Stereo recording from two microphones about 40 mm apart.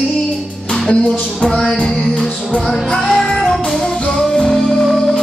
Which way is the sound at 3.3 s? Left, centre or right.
Centre.